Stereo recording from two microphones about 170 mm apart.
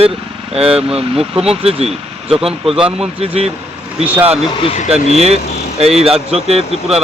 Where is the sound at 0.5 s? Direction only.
35° right (ahead or behind).